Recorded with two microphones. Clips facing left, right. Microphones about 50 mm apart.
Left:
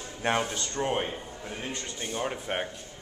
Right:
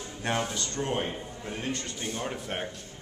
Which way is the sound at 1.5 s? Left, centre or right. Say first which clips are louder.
Right 3 dB; centre.